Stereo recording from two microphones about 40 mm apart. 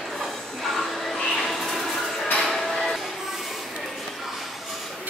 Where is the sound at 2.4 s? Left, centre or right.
Centre.